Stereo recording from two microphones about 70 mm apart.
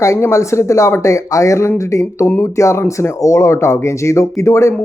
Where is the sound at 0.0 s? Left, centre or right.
Left.